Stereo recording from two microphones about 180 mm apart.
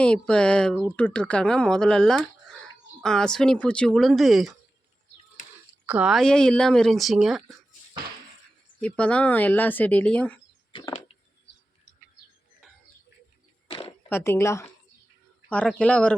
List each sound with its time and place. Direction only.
0.0 s speech: 5° left (ahead or behind)
5.8 s speech: 5° right (ahead or behind)
8.8 s speech: 5° left (ahead or behind)
10.7 s a sound: 25° left (ahead or behind)
14.1 s speech: 15° left (ahead or behind)